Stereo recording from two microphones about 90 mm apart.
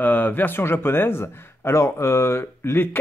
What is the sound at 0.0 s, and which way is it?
Speech, 20° left (ahead or behind).